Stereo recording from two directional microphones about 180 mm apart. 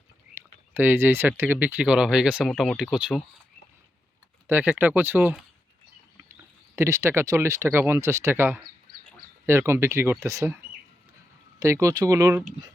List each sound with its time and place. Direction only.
0.7 s speech: 10° right (ahead or behind)
4.4 s speech: 10° right (ahead or behind)
6.7 s speech: 15° right (ahead or behind)
11.6 s speech: 15° right (ahead or behind)